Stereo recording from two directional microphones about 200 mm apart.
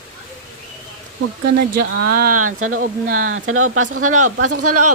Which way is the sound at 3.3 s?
85° right.